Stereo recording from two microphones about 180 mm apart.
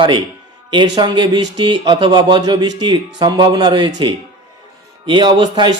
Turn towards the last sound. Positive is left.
turn(degrees=-25)  # may be behind; listen again after turning